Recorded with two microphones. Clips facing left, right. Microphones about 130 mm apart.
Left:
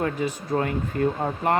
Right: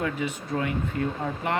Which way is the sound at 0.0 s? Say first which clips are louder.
Left 3 dB; 40° left (ahead or behind).